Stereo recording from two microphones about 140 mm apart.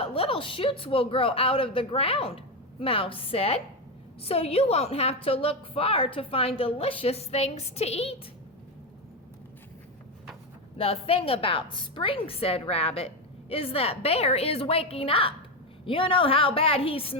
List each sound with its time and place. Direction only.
0.0 s a woman's voice: 40° left (ahead or behind)
10.8 s a woman's voice: 45° left (ahead or behind)